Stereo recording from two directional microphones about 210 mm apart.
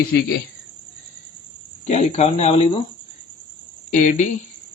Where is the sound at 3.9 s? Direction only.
35° left (ahead or behind).